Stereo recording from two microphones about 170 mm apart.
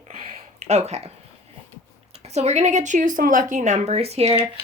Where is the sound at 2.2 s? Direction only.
40° right (ahead or behind).